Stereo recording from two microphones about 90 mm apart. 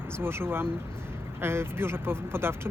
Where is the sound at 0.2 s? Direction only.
25° right (ahead or behind).